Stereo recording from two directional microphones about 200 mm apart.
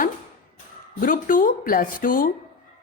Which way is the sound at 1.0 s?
45° left (ahead or behind).